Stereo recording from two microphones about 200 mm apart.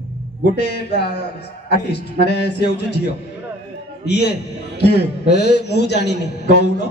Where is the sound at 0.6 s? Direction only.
55° left (ahead or behind).